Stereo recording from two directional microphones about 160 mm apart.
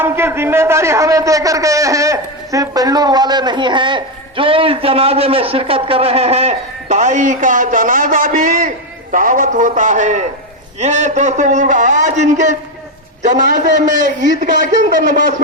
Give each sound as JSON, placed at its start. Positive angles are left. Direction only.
{"t": 0.0, "sound": "a man's voice", "side_deg": -15}